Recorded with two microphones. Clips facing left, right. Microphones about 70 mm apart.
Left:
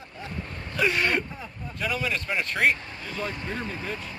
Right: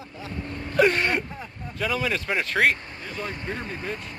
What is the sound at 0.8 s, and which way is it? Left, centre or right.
Speech, right.